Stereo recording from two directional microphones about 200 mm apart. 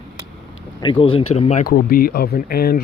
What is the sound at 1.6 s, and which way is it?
Speech, 45° left (ahead or behind).